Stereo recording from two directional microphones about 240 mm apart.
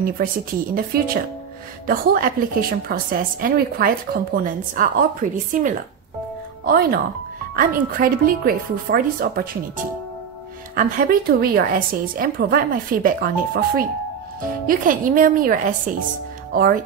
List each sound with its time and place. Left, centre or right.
0.0 s a woman's voice: right
8.0 s a woman's voice: right
10.8 s a woman's voice: right